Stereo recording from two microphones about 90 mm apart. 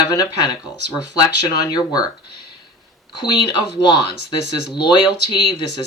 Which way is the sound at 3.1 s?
60° left (ahead or behind).